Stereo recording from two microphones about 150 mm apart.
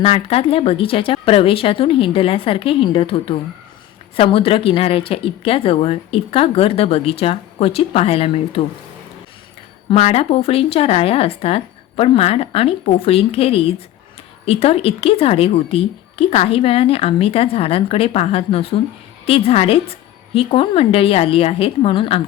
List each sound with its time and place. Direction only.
0.0 s speech: 40° left (ahead or behind)
9.9 s speech: 45° left (ahead or behind)